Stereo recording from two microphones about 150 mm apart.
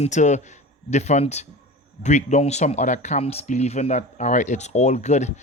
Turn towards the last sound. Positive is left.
turn(degrees=50)  # may be behind; listen again after turning